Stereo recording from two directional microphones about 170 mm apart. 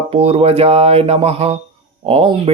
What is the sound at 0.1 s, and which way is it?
Speech, 35° right (ahead or behind).